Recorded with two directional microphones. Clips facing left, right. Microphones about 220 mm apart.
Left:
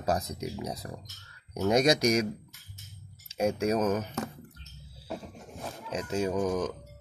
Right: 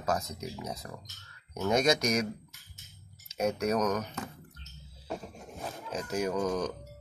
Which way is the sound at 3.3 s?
30° left (ahead or behind).